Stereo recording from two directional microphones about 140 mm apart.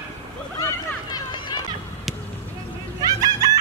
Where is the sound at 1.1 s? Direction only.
30° left (ahead or behind).